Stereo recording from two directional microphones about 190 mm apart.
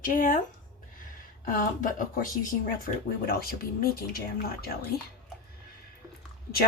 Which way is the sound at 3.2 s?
50° left (ahead or behind).